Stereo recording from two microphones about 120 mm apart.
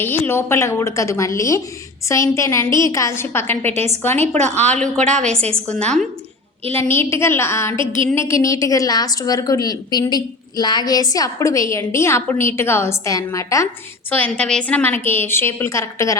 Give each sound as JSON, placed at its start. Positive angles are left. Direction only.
{"t": 0.0, "sound": "a woman's voice", "side_deg": 15}
{"t": 4.4, "sound": "a woman's voice", "side_deg": -70}
{"t": 5.8, "sound": "a woman's voice", "side_deg": 5}
{"t": 6.7, "sound": "a woman's voice", "side_deg": 20}
{"t": 7.8, "sound": "a sound", "side_deg": -45}
{"t": 8.1, "sound": "a woman's voice", "side_deg": 25}
{"t": 14.1, "sound": "a woman's voice", "side_deg": 10}